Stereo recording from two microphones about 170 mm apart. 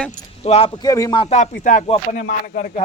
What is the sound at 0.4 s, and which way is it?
Speech, 35° left (ahead or behind).